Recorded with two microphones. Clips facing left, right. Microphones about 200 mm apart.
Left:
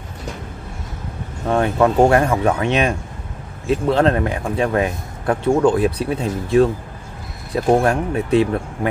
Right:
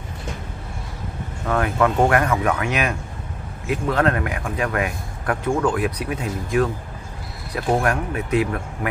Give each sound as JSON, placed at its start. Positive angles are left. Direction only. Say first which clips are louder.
{"t": 1.5, "sound": "a man's voice", "louder": "left 4 dB", "side_deg": 30}